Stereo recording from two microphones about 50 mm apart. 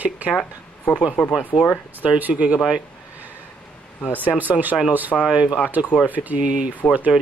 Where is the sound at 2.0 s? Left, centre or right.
Right.